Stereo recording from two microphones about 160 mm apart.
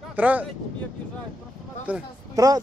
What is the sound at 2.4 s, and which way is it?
Speech, 20° right (ahead or behind).